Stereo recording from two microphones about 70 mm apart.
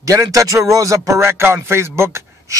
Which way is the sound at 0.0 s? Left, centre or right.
Right.